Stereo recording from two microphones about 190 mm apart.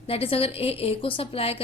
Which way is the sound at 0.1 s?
30° left (ahead or behind).